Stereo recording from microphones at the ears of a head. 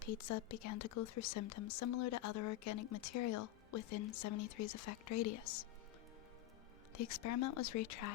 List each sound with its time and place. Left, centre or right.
0.0 s speech: left
6.9 s speech: left